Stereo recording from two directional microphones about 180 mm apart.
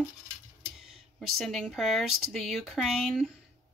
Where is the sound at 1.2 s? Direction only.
Centre (ahead or behind).